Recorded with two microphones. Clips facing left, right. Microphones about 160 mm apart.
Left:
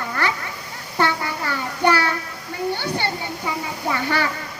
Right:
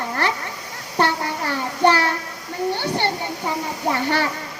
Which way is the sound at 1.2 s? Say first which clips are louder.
Right 2 dB; 25° right (ahead or behind).